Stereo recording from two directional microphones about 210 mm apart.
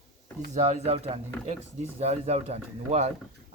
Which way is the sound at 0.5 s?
30° right (ahead or behind).